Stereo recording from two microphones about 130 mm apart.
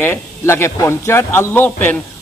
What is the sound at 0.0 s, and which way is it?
A man's voice, 15° left (ahead or behind).